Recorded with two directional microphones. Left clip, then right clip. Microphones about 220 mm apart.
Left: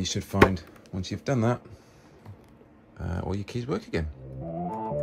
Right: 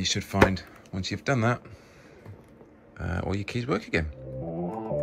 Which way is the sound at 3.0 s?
15° left (ahead or behind).